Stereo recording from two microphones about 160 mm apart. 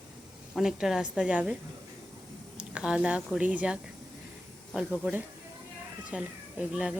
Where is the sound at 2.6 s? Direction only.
5° right (ahead or behind).